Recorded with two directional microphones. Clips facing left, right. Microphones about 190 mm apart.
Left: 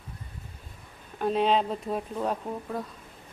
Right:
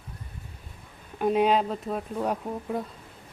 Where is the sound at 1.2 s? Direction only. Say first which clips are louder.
Right 2 dB; 10° right (ahead or behind).